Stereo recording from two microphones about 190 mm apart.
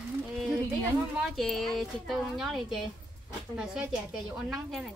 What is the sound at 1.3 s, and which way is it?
A woman's voice, centre (ahead or behind).